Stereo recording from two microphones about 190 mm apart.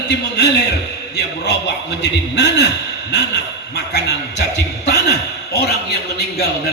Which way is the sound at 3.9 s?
60° left (ahead or behind).